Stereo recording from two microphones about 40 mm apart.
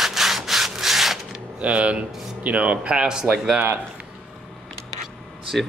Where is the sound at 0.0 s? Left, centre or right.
Centre.